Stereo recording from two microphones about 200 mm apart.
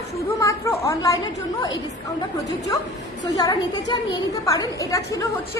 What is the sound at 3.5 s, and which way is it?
A woman's voice, 15° left (ahead or behind).